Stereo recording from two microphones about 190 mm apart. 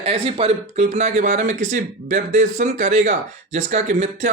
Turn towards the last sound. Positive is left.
turn(degrees=-40)  # may be behind; listen again after turning